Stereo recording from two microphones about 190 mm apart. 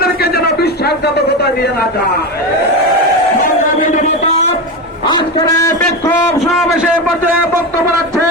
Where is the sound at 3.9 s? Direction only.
35° left (ahead or behind).